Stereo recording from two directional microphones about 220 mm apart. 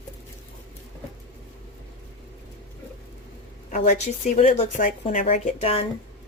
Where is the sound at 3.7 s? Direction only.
30° left (ahead or behind).